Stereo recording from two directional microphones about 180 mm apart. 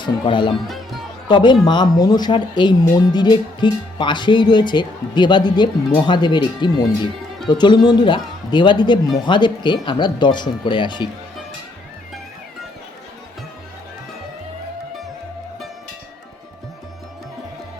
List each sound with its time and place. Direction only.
0.0 s speech: 25° left (ahead or behind)